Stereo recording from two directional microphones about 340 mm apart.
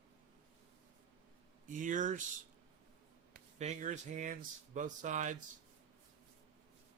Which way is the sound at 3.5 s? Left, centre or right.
Centre.